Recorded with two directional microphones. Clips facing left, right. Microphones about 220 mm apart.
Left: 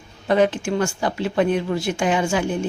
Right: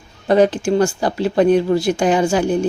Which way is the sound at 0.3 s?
35° right (ahead or behind).